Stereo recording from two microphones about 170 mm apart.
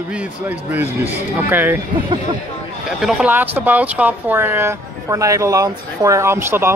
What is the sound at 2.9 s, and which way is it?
A man's voice, 5° right (ahead or behind).